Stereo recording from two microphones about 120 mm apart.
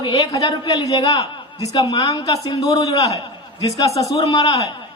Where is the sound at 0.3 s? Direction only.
35° left (ahead or behind).